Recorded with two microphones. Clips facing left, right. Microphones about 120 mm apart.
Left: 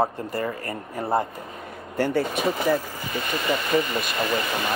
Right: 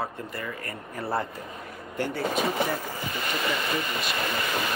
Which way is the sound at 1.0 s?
20° left (ahead or behind).